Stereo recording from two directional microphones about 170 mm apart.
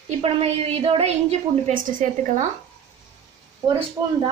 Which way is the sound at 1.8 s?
50° right (ahead or behind).